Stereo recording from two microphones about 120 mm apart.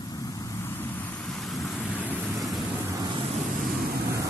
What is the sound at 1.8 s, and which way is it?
Vehicle, 15° left (ahead or behind).